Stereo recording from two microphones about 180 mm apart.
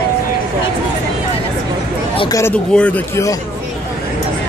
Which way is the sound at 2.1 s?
20° left (ahead or behind).